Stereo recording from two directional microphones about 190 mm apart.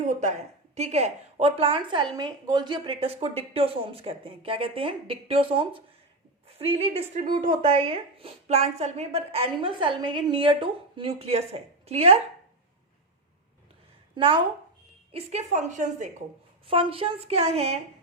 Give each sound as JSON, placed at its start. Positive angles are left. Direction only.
{"t": 0.8, "sound": "a woman's voice", "side_deg": -35}
{"t": 14.2, "sound": "a woman's voice", "side_deg": -25}
{"t": 16.6, "sound": "a woman's voice", "side_deg": -30}